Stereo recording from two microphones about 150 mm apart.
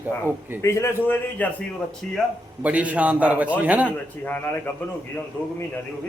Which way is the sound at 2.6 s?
10° right (ahead or behind).